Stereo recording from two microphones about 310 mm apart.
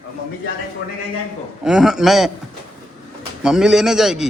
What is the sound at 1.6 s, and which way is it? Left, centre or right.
Speech, centre.